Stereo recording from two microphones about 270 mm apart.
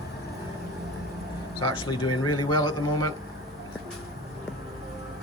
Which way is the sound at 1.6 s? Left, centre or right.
Centre.